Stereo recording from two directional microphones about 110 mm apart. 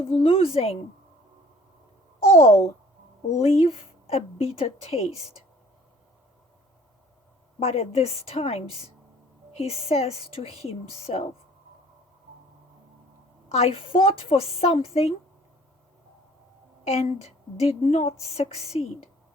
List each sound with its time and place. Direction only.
0.0 s a woman's voice: 60° left (ahead or behind)
2.2 s a sound: 70° left (ahead or behind)
3.2 s speech: 80° left
7.6 s a woman's voice: 75° left (ahead or behind)
13.5 s a woman's voice: 70° left (ahead or behind)
16.8 s speech: 70° left (ahead or behind)